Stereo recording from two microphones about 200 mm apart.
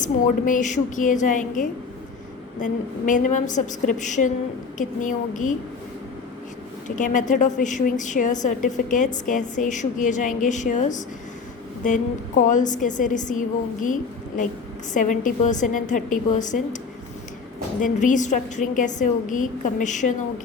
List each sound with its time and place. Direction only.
0.0 s a woman's voice: 40° left (ahead or behind)
6.8 s a woman's voice: 40° left (ahead or behind)
12.5 s a woman's voice: 40° left (ahead or behind)